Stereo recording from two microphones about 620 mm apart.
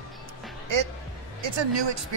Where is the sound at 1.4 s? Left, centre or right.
Right.